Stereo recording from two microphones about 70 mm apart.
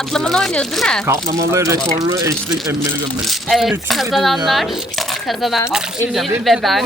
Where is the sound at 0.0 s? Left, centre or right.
Centre.